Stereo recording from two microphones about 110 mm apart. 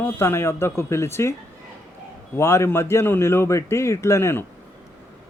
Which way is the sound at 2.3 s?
25° left (ahead or behind).